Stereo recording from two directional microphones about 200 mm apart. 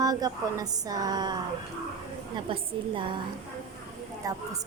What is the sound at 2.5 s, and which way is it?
Speech, 25° right (ahead or behind).